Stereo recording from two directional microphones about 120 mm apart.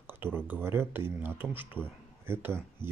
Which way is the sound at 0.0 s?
15° right (ahead or behind).